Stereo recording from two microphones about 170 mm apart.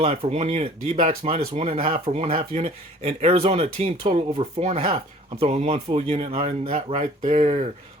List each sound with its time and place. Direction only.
0.0 s speech: 35° right (ahead or behind)